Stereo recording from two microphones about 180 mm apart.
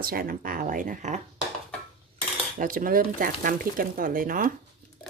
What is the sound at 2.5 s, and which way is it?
Speech, 50° right (ahead or behind).